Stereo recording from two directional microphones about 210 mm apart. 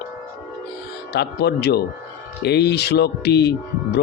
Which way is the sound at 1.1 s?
50° left (ahead or behind).